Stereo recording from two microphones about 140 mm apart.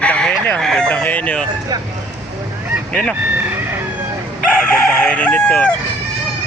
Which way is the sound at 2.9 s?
5° left (ahead or behind).